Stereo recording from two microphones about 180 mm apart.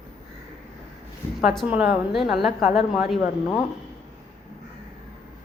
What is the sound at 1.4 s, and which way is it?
A woman's voice, centre (ahead or behind).